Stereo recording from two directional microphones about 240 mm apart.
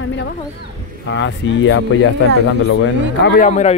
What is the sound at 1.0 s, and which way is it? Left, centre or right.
Speech, left.